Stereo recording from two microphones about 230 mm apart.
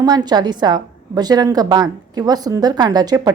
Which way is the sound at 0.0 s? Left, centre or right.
Centre.